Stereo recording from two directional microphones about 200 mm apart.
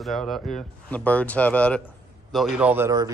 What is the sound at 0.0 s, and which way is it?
Speech, centre (ahead or behind).